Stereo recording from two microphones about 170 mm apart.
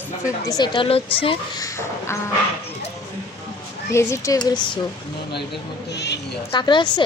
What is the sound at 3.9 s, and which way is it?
Speech, 15° left (ahead or behind).